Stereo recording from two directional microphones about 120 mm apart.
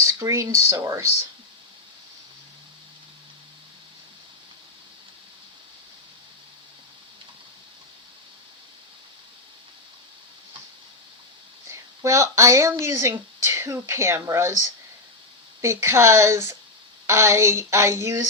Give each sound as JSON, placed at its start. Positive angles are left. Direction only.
{"t": 0.0, "sound": "speech", "side_deg": -25}
{"t": 11.7, "sound": "speech", "side_deg": -25}
{"t": 15.6, "sound": "speech", "side_deg": -25}